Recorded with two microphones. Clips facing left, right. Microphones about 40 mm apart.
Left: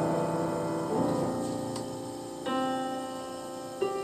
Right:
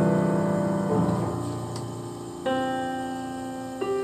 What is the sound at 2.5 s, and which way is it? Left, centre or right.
Music, centre.